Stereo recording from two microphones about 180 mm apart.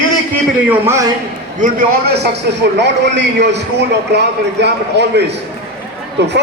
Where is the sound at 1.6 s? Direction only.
60° right (ahead or behind).